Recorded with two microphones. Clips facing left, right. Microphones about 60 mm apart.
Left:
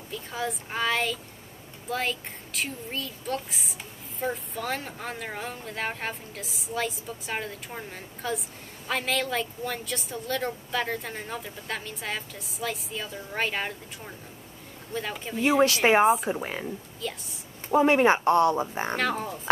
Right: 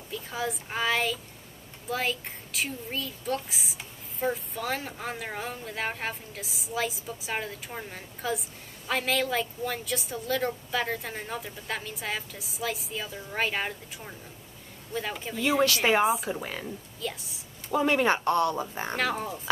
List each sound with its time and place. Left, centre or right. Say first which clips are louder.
0.1 s speech: even; centre
15.6 s speech: left 4 dB; left
16.6 s speech: left 1 dB; centre
17.6 s speech: left 4 dB; left
18.9 s speech: right 1 dB; centre